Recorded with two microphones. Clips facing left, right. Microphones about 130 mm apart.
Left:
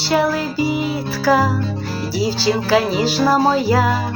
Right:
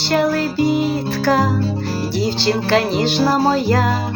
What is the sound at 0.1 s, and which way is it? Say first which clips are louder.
Music: right 1 dB; 5° left (ahead or behind).